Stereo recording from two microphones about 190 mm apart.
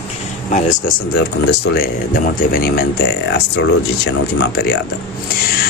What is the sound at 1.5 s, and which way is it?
Speech, 50° left (ahead or behind).